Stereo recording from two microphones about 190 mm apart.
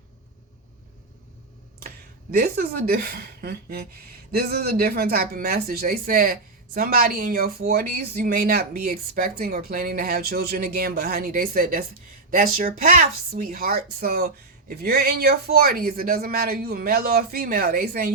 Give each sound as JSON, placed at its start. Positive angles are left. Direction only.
{"t": 2.3, "sound": "speech", "side_deg": -50}